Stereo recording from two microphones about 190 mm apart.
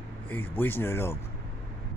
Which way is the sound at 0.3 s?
10° left (ahead or behind).